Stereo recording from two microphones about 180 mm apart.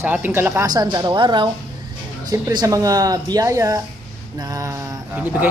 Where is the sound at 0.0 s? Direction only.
10° right (ahead or behind).